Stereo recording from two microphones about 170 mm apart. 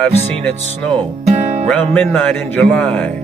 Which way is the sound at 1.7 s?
5° left (ahead or behind).